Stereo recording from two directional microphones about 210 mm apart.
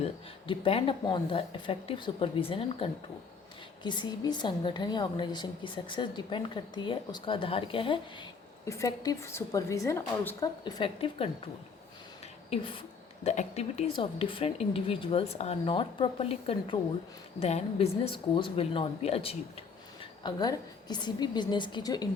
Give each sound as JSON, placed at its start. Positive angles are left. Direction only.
{"t": 0.0, "sound": "a woman's voice", "side_deg": 25}
{"t": 12.5, "sound": "a woman's voice", "side_deg": 25}